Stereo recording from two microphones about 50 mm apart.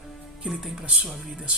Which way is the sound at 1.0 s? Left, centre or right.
Centre.